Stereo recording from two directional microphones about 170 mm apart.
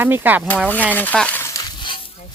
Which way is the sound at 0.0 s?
10° right (ahead or behind).